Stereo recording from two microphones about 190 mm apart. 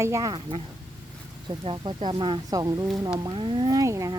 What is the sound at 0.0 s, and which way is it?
Speech, 15° right (ahead or behind).